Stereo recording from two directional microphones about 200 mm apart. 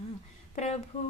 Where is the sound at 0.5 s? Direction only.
35° left (ahead or behind).